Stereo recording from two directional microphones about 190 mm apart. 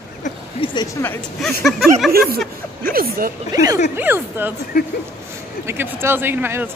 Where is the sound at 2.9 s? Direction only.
50° right (ahead or behind).